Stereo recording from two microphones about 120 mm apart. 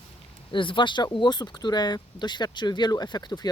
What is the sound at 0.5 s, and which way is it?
Speech, 45° left (ahead or behind).